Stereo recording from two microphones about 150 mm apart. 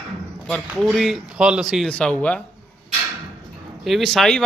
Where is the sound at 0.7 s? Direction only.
Centre (ahead or behind).